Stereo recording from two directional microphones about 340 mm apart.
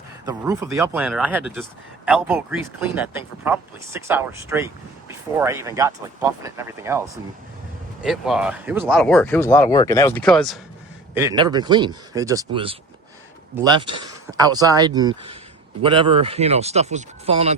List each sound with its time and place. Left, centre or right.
0.3 s speech: centre
13.6 s speech: centre